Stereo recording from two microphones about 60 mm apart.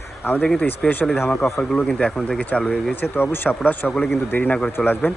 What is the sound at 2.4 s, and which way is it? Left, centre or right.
Speech, left.